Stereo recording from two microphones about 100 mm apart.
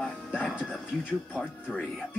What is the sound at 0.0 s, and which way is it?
Music, 10° left (ahead or behind).